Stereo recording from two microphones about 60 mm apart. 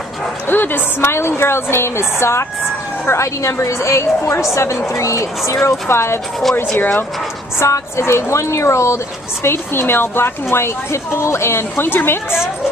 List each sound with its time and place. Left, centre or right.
0.5 s speech: left
5.7 s speech: left
6.5 s speech: left
7.5 s speech: left